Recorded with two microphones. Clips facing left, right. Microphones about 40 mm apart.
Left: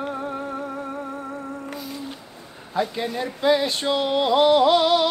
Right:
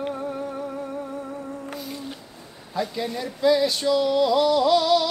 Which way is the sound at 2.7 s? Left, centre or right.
Left.